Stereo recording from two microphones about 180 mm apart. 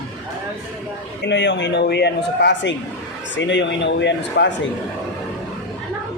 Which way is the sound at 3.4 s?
85° left.